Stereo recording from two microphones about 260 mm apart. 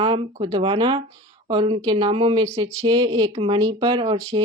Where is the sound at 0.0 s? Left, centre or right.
Centre.